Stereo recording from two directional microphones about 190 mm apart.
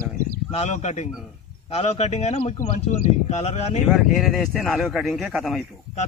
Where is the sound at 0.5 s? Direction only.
35° left (ahead or behind).